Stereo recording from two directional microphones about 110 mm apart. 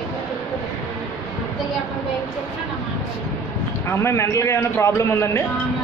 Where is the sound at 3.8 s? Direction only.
25° left (ahead or behind).